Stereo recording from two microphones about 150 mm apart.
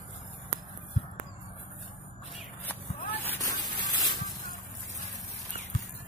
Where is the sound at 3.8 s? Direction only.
25° left (ahead or behind).